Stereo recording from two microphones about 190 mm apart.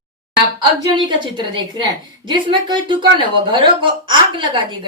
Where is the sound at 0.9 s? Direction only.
25° right (ahead or behind).